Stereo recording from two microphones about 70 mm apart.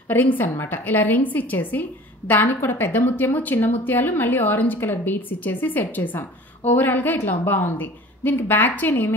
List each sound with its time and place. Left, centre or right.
0.1 s a woman's voice: left